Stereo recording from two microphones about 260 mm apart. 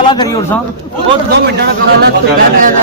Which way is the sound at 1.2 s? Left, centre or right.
Right.